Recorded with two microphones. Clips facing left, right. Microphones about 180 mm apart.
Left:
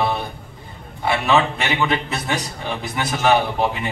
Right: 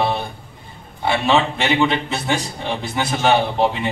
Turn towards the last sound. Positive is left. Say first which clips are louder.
# right 2 dB
turn(degrees=-25)  # may be behind; listen again after turning